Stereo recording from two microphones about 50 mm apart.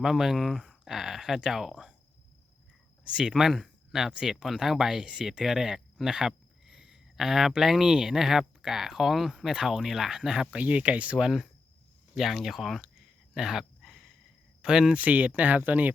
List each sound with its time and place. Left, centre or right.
0.0 s speech: centre
3.0 s speech: centre
3.3 s speech: centre
10.6 s speech: right
11.2 s speech: centre
12.8 s a sound: centre
14.6 s speech: centre
14.9 s speech: right